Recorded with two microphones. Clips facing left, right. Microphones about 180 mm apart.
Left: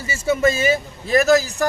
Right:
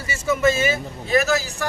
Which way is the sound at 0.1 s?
30° left (ahead or behind).